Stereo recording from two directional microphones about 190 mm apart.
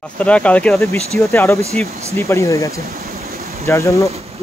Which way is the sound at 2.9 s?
50° right (ahead or behind).